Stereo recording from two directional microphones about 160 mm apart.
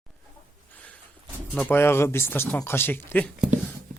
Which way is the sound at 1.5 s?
10° left (ahead or behind).